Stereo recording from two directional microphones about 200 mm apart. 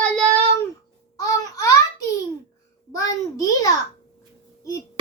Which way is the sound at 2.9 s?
15° left (ahead or behind).